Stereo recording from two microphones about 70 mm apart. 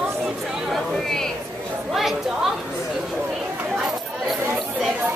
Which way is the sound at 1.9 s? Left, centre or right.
Centre.